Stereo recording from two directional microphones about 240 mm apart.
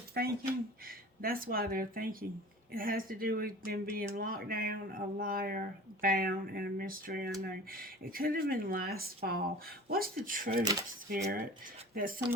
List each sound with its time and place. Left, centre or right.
0.1 s speech: right
10.6 s speech: centre
11.1 s speech: right